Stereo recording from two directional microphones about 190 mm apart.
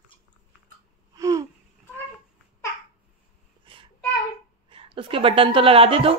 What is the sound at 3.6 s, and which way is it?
Child singing, 25° right (ahead or behind).